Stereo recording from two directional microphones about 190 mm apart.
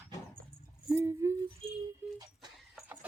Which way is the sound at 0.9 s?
15° right (ahead or behind).